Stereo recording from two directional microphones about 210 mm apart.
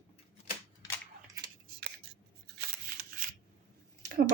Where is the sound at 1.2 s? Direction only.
15° right (ahead or behind).